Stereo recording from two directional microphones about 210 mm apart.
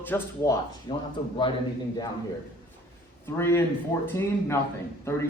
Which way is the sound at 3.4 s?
10° left (ahead or behind).